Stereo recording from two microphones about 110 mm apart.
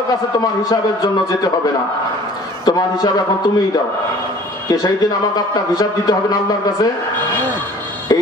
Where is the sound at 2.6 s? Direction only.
40° left (ahead or behind).